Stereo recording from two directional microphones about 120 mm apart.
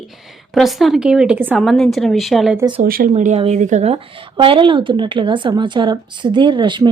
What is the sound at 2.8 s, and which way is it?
Speech, 80° right.